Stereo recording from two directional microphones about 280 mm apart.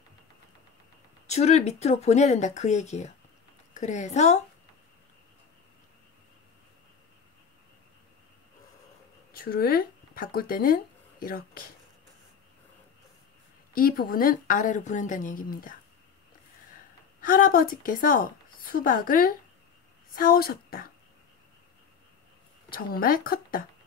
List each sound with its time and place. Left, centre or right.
1.2 s speech: left
9.3 s speech: left
13.7 s speech: left
17.2 s a woman's voice: left
22.7 s a woman's voice: left